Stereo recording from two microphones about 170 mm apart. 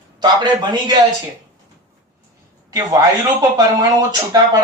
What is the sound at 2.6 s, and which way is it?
A man's voice, 20° right (ahead or behind).